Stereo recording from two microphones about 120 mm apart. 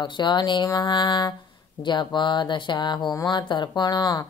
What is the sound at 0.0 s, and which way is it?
Speech, 40° left (ahead or behind).